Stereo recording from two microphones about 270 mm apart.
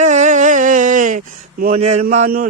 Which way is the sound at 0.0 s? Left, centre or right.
Right.